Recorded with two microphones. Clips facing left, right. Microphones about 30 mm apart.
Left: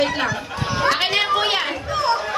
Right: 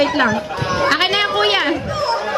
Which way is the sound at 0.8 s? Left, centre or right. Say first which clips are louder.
Right 2 dB; centre.